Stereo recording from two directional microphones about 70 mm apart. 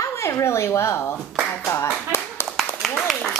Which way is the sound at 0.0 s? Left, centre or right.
Left.